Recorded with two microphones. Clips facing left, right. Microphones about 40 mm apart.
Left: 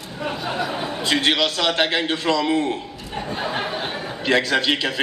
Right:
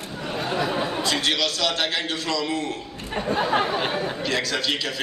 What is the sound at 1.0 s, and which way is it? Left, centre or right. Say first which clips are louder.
A man's voice: left 7 dB; left.